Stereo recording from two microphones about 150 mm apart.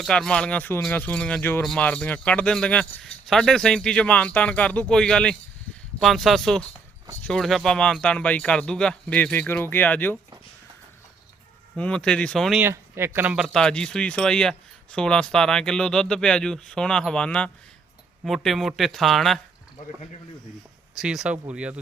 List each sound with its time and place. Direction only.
0.0 s speech: 5° left (ahead or behind)
11.8 s speech: 5° left (ahead or behind)
12.5 s speech: 15° right (ahead or behind); by 19.4 s centre (ahead or behind)
20.9 s speech: 5° right (ahead or behind)